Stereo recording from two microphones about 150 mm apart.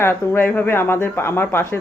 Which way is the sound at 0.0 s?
15° left (ahead or behind).